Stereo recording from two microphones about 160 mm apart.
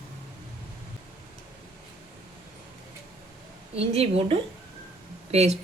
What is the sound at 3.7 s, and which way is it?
Speech, 40° right (ahead or behind).